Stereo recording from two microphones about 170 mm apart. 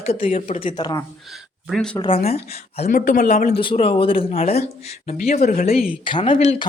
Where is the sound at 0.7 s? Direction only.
25° left (ahead or behind).